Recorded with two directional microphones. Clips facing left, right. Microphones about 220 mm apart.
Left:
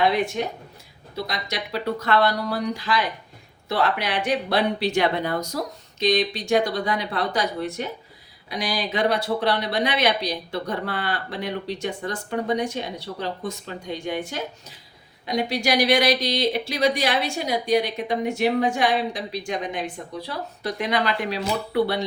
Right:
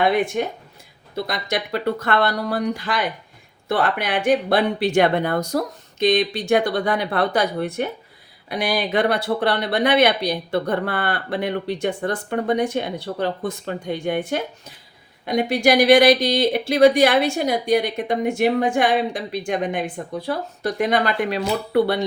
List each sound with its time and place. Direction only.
0.0 s speech: 50° right (ahead or behind)